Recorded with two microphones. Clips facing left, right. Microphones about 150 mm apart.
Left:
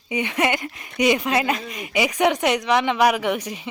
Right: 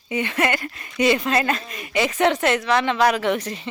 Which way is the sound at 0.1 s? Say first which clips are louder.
Even; 15° left (ahead or behind).